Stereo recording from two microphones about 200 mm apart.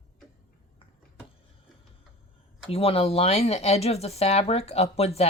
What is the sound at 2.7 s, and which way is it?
Speech, 30° left (ahead or behind).